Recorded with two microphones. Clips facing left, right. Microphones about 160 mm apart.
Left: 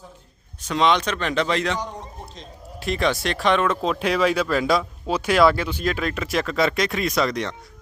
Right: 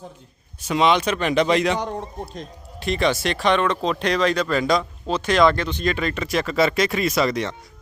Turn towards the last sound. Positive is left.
turn(degrees=0)  # may be behind; listen again after turning